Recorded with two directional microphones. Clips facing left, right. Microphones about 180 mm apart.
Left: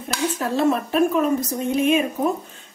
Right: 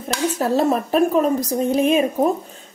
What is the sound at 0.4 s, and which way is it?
A woman's voice, 40° right (ahead or behind).